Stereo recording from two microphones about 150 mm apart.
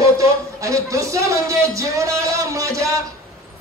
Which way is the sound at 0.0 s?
20° right (ahead or behind).